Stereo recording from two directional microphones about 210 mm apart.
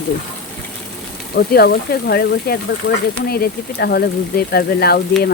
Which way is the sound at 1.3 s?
50° left (ahead or behind).